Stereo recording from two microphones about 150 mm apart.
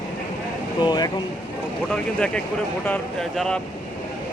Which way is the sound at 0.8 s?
30° left (ahead or behind).